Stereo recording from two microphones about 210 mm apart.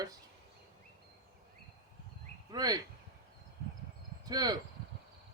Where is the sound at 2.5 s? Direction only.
20° right (ahead or behind).